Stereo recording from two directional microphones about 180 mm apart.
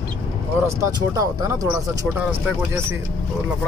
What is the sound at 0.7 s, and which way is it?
Speech, 20° right (ahead or behind).